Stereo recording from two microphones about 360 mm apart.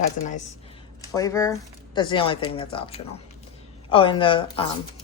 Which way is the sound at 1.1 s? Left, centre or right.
Centre.